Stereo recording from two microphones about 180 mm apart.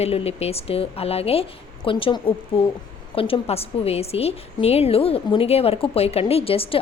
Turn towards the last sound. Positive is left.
turn(degrees=30)  # may be behind; listen again after turning